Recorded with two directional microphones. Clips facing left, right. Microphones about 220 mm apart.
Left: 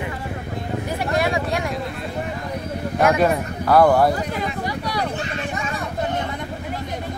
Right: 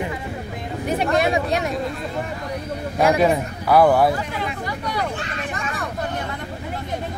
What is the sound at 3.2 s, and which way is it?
Speech, 5° right (ahead or behind).